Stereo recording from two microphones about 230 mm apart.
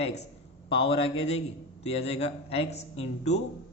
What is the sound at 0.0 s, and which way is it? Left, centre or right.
Speech, left.